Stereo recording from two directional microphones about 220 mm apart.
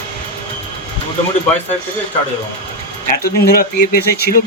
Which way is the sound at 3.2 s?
45° left (ahead or behind).